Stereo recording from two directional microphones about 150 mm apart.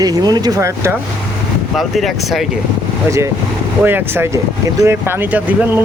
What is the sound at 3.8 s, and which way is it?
Speech, 15° right (ahead or behind).